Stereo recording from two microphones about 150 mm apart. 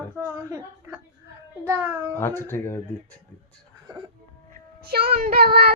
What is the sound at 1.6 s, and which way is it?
Speech, 15° right (ahead or behind).